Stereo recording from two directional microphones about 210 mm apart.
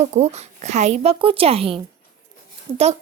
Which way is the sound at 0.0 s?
30° right (ahead or behind).